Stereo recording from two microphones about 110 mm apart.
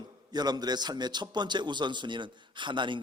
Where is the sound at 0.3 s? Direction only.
40° right (ahead or behind).